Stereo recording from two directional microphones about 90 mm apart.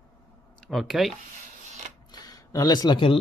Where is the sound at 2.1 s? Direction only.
45° left (ahead or behind).